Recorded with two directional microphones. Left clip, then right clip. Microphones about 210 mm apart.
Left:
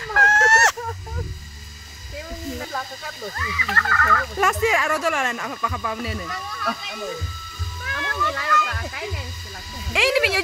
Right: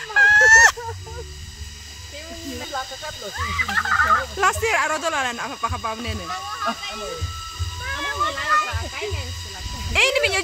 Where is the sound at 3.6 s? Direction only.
30° right (ahead or behind).